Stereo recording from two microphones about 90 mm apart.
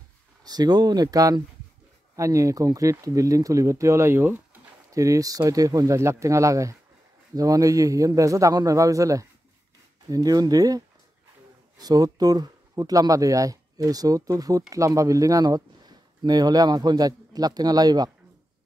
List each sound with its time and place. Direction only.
0.4 s speech: 45° right (ahead or behind); by 4.4 s 25° right (ahead or behind)
4.9 s speech: 40° right (ahead or behind)
11.8 s speech: 45° right (ahead or behind)